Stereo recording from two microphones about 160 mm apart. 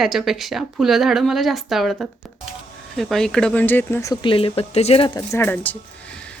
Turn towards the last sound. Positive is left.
turn(degrees=10)  # may be behind; listen again after turning